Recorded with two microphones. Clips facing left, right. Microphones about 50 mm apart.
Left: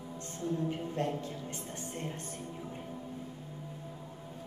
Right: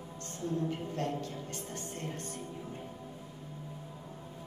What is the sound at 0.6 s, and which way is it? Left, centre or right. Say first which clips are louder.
A woman's voice: even; left.